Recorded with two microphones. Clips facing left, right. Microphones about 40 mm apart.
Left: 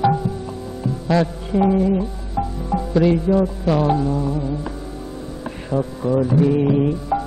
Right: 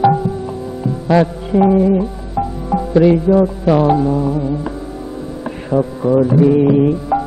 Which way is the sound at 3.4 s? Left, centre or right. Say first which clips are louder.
Right 6 dB; centre.